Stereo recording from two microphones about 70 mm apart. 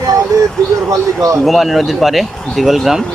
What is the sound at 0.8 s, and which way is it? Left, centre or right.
Speech, right.